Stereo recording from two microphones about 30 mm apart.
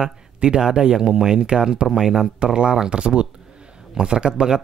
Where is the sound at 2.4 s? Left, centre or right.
Right.